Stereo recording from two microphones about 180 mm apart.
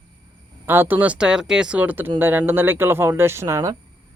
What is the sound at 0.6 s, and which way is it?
Speech, 10° right (ahead or behind).